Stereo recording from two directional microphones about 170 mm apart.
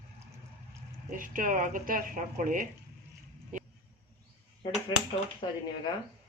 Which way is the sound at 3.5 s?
50° right (ahead or behind).